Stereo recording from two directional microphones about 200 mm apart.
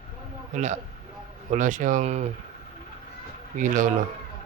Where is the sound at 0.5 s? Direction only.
35° right (ahead or behind).